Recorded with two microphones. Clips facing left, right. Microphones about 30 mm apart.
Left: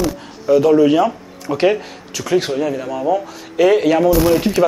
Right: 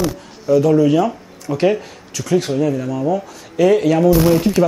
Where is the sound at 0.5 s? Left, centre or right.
Left.